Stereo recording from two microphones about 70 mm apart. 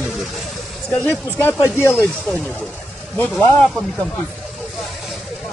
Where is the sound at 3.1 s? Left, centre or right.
Centre.